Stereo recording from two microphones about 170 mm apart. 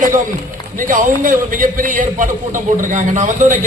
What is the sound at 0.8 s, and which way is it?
A man's voice, 50° right (ahead or behind).